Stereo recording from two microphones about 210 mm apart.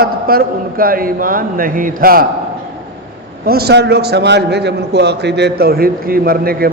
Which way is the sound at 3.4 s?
50° right (ahead or behind).